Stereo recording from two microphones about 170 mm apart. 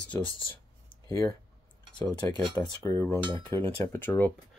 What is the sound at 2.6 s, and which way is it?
Speech, 10° left (ahead or behind).